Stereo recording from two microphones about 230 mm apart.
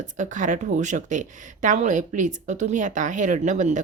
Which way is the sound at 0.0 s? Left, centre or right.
Right.